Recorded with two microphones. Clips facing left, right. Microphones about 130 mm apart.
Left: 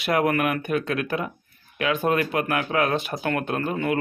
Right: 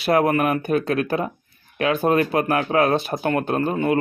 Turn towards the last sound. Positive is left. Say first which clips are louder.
# right 4 dB
turn(degrees=-30)  # may be behind; listen again after turning